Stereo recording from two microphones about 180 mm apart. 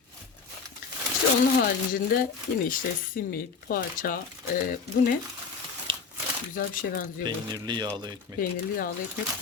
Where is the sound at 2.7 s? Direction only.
50° left (ahead or behind).